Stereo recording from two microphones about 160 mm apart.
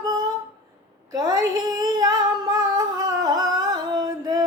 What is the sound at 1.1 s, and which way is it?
Humming, 20° right (ahead or behind).